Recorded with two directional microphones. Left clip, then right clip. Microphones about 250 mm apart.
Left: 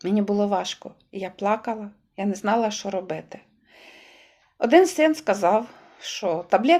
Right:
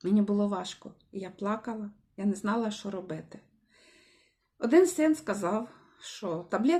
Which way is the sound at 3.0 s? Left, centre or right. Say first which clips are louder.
Left 10 dB; left.